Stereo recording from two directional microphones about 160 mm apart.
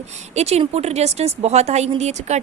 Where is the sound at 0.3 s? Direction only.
40° right (ahead or behind).